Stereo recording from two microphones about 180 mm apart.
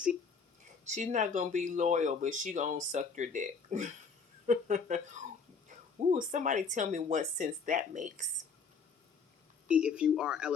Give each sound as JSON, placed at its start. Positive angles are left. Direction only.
{"t": 0.9, "sound": "speech", "side_deg": -40}
{"t": 9.6, "sound": "speech", "side_deg": -5}